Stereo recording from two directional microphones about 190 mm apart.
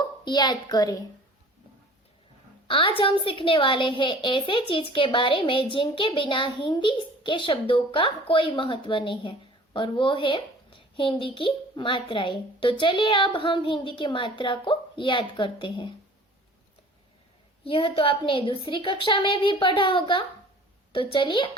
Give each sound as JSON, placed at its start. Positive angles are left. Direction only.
{"t": 0.3, "sound": "a woman's voice", "side_deg": 20}
{"t": 2.6, "sound": "a woman's voice", "side_deg": 30}
{"t": 17.6, "sound": "a woman's voice", "side_deg": 30}